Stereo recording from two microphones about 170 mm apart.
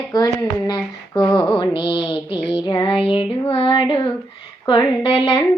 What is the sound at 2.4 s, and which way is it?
Child singing, 30° left (ahead or behind).